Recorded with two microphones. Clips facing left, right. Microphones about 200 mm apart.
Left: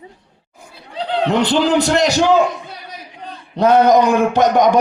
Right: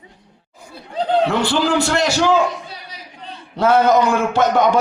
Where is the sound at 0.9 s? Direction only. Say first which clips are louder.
Right 3 dB; 45° right (ahead or behind).